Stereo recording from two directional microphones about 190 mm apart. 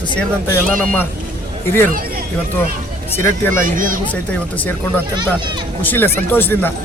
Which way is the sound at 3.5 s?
45° right (ahead or behind).